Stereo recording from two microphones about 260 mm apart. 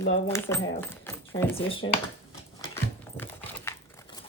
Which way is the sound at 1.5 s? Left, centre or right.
Left.